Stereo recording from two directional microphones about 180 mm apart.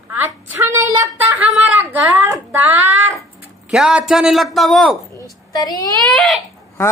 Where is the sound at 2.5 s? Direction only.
15° right (ahead or behind).